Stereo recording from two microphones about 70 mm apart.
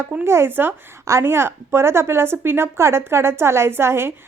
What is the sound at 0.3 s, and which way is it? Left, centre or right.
A woman's voice, right.